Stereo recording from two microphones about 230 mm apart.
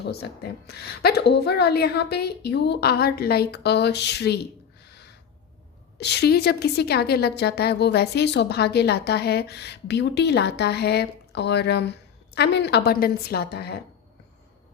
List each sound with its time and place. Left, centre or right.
0.0 s a woman's voice: left
4.9 s a sound: left
6.0 s a woman's voice: left